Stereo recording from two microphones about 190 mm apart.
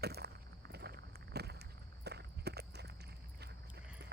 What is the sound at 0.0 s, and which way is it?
Vehicle, 60° right (ahead or behind).